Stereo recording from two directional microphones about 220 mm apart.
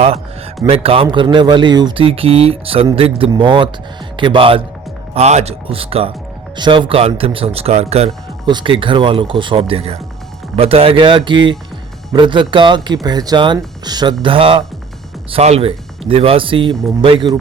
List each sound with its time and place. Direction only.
0.6 s speech: 25° right (ahead or behind)